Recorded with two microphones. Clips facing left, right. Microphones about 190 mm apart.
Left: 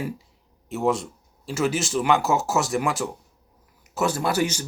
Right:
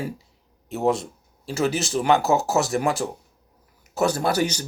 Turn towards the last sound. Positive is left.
turn(degrees=-40)  # may be behind; listen again after turning